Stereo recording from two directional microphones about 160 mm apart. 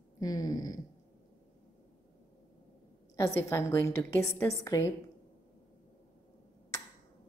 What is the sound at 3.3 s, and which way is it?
A woman's voice, 15° left (ahead or behind).